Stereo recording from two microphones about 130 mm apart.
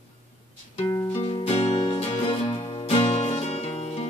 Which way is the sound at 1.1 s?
55° left (ahead or behind).